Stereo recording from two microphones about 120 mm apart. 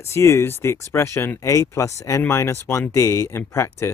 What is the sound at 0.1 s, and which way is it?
Speech, 20° left (ahead or behind).